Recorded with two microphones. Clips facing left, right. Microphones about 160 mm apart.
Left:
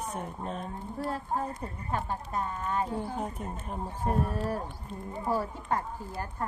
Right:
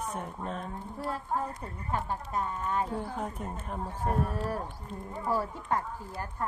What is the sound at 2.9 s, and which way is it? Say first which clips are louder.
Speech: left 1 dB; 25° left (ahead or behind).